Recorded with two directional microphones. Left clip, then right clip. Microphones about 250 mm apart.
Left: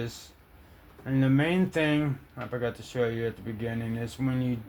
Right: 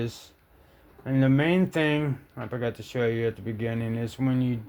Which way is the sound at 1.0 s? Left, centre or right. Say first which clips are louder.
Right 2 dB; right.